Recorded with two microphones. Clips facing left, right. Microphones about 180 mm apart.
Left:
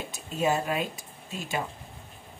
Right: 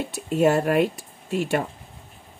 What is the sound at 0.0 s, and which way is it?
Speech, 70° right (ahead or behind).